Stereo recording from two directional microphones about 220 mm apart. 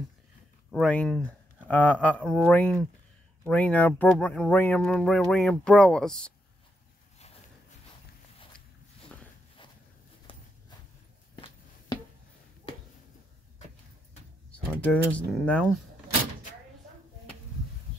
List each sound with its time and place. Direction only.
0.7 s speech: centre (ahead or behind)
9.1 s walk: 5° left (ahead or behind)
10.3 s a sound: 25° left (ahead or behind)
14.5 s speech: 5° left (ahead or behind)